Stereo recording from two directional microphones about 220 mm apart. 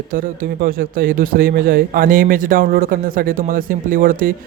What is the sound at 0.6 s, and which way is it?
Speech, 40° right (ahead or behind).